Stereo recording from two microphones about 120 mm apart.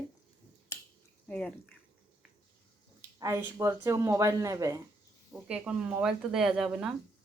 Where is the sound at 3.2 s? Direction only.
25° right (ahead or behind).